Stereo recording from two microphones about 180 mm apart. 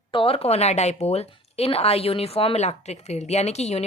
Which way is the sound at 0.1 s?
30° left (ahead or behind).